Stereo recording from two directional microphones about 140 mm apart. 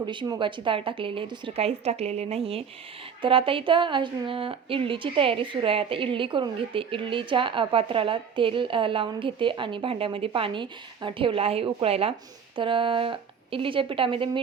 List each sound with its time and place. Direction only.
0.0 s a woman's voice: 35° right (ahead or behind)